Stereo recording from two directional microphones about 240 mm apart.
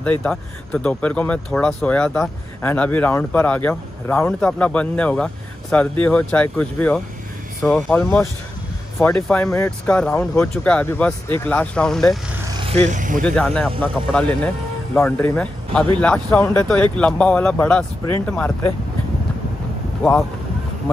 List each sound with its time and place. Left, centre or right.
0.0 s speech: centre
12.5 s speech: right
13.2 s speech: centre
20.0 s speech: centre